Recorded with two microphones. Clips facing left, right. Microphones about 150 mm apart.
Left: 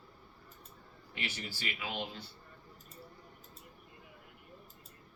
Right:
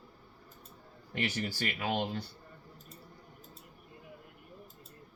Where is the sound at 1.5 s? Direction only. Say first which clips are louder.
Right 7 dB; 50° right (ahead or behind).